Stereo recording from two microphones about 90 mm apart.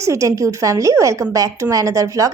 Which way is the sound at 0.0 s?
35° right (ahead or behind).